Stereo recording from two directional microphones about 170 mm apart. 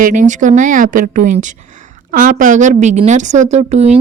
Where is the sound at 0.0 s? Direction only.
50° right (ahead or behind).